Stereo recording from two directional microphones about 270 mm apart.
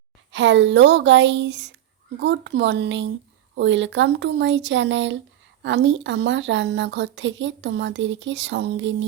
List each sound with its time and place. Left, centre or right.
0.3 s speech: right